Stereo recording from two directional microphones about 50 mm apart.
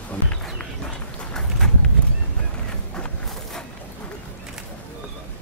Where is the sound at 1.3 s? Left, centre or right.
Centre.